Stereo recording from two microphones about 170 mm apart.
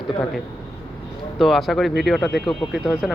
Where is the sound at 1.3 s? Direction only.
Centre (ahead or behind).